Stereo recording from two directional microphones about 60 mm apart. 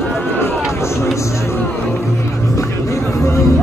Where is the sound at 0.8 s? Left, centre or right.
Left.